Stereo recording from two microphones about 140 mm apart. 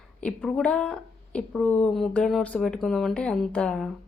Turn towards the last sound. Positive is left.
turn(degrees=5)  # may be behind; listen again after turning